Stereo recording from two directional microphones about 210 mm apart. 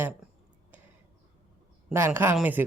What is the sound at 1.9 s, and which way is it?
Speech, 10° right (ahead or behind).